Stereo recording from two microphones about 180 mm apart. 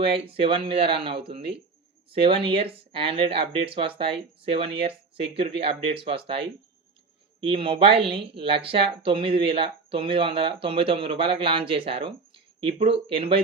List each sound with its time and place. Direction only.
0.1 s speech: 30° right (ahead or behind)